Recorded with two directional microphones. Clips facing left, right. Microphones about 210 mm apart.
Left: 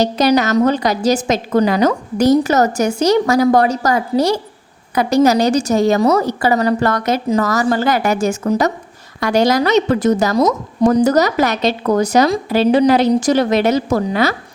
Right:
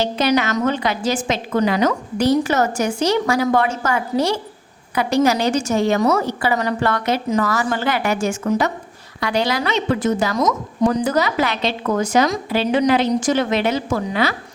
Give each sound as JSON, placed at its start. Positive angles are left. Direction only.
{"t": 0.0, "sound": "a woman's voice", "side_deg": 40}